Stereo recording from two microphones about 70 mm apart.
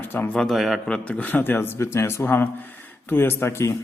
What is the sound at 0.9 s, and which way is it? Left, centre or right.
Speech, centre.